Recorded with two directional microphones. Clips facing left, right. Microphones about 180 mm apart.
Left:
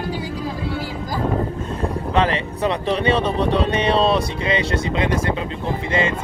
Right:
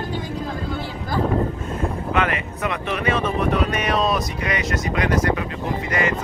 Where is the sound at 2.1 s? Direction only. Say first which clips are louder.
Left 4 dB; 30° left (ahead or behind).